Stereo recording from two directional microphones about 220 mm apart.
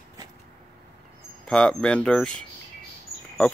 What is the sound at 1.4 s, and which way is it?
Speech, 5° left (ahead or behind).